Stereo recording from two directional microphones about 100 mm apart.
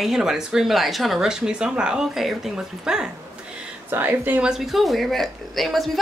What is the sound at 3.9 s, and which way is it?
Speech, 20° right (ahead or behind).